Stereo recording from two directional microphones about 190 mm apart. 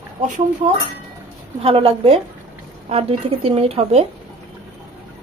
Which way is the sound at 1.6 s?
30° right (ahead or behind).